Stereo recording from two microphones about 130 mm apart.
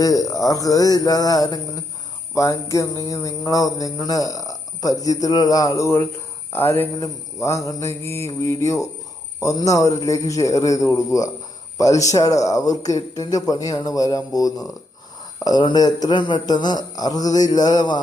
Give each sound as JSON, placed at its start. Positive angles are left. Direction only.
{"t": 0.0, "sound": "a man's voice", "side_deg": 25}